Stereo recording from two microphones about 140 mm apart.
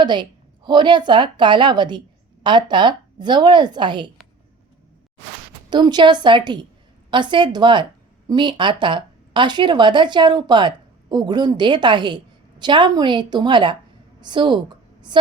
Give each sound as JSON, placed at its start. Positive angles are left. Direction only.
{"t": 0.0, "sound": "speech", "side_deg": -30}
{"t": 5.7, "sound": "a woman's voice", "side_deg": -30}